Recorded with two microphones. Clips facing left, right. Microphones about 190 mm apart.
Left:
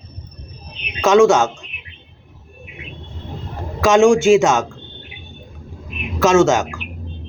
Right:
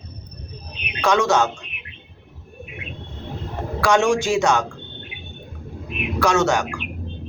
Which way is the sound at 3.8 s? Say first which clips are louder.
Left 6 dB; 20° left (ahead or behind).